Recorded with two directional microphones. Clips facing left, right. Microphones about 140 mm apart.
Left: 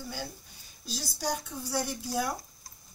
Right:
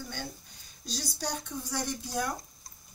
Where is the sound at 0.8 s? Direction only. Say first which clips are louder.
Left 2 dB; 10° left (ahead or behind).